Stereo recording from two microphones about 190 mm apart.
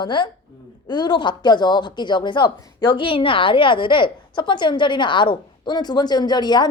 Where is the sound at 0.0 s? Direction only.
25° left (ahead or behind).